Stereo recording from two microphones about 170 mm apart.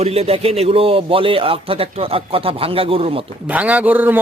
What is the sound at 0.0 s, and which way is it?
Speech, 35° right (ahead or behind).